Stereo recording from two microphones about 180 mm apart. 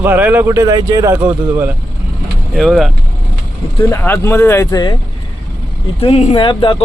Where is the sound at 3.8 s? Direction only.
10° left (ahead or behind).